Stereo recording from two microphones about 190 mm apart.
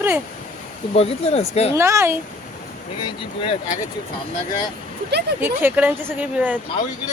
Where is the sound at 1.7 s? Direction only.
15° right (ahead or behind).